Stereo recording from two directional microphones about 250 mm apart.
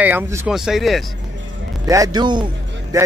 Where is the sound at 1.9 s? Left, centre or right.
Centre.